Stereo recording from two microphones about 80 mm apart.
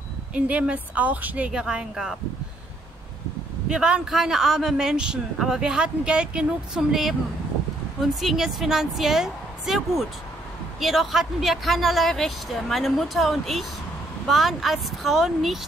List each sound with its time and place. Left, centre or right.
0.3 s speech: centre
3.6 s speech: centre